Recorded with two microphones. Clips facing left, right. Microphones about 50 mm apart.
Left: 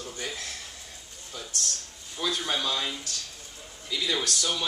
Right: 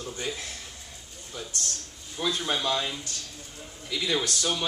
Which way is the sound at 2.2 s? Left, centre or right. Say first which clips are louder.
Right 1 dB; right.